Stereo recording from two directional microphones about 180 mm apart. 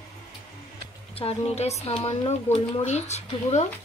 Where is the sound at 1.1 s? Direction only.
35° left (ahead or behind).